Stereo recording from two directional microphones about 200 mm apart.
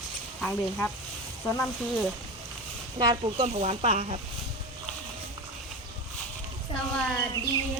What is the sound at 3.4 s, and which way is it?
Speech, 35° right (ahead or behind).